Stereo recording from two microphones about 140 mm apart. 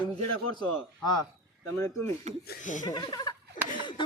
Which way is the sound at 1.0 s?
30° left (ahead or behind).